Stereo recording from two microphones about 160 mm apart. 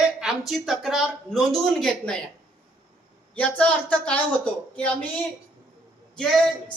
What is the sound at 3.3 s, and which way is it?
Speech, 10° left (ahead or behind).